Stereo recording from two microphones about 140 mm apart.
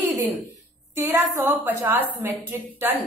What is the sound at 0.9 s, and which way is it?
A woman's voice, 15° right (ahead or behind).